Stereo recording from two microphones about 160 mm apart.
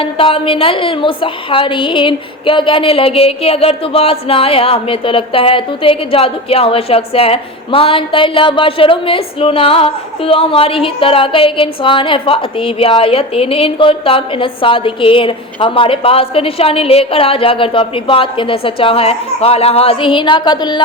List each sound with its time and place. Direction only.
0.0 s a woman's voice: 35° left (ahead or behind)